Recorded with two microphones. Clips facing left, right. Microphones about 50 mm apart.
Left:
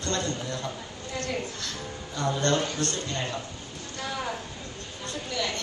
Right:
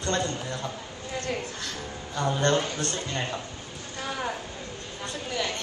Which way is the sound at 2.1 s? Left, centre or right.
Centre.